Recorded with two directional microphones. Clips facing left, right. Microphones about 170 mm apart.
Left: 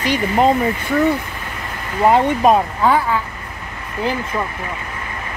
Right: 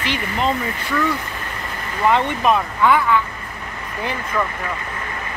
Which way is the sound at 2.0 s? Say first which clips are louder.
Left 4 dB; 45° left (ahead or behind).